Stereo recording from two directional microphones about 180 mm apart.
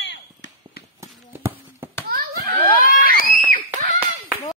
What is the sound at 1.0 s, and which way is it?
Clip-clop, 15° right (ahead or behind).